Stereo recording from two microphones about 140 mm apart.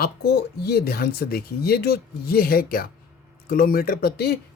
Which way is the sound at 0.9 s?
90° left.